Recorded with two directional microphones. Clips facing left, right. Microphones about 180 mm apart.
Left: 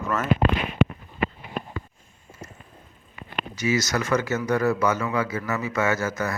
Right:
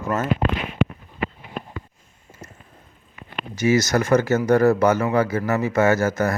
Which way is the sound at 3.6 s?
50° right (ahead or behind).